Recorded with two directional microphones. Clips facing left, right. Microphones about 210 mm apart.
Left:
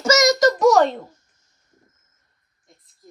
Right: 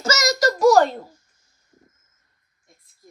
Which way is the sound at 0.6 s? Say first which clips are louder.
Right 5 dB; 5° right (ahead or behind).